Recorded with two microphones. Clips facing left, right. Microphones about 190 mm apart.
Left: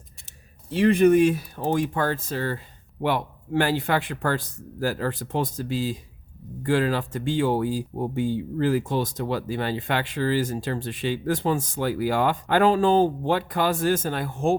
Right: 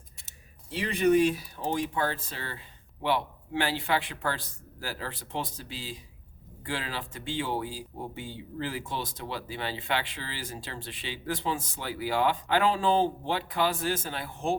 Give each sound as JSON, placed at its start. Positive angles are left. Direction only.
{"t": 0.7, "sound": "speech", "side_deg": 50}